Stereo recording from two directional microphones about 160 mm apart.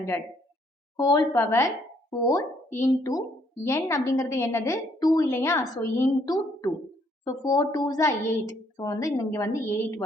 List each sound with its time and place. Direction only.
0.9 s a woman's voice: 25° left (ahead or behind)